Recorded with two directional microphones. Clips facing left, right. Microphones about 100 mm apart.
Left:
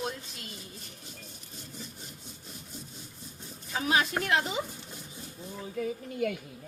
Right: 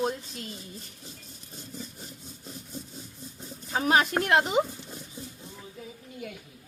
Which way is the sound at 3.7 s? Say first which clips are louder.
Right 4 dB; 40° right (ahead or behind).